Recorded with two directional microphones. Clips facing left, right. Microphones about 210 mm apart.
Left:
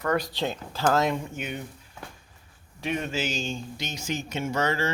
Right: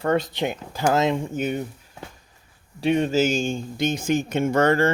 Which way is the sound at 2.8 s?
30° right (ahead or behind).